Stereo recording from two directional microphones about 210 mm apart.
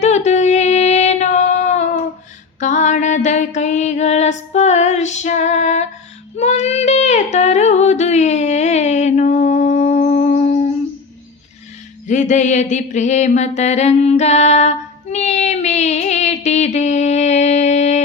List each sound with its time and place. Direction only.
0.0 s child singing: 35° left (ahead or behind)
2.6 s a sound: 35° left (ahead or behind)
6.3 s female singing: 30° left (ahead or behind)
12.0 s mantra: 35° left (ahead or behind)